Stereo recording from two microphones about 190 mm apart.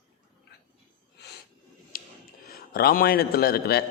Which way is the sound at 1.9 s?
50° left (ahead or behind).